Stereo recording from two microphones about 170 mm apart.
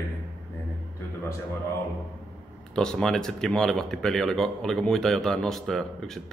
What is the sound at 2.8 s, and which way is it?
Speech, 5° left (ahead or behind).